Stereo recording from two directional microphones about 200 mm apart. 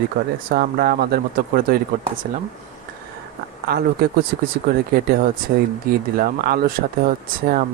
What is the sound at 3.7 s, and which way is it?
Speech, 50° right (ahead or behind).